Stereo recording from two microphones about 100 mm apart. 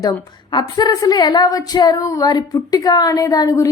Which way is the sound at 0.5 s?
45° left (ahead or behind).